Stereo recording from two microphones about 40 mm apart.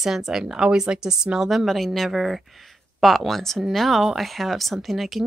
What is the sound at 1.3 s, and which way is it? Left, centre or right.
Speech, centre.